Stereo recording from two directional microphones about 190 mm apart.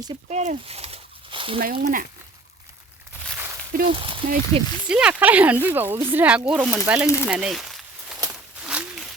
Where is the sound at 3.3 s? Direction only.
10° right (ahead or behind).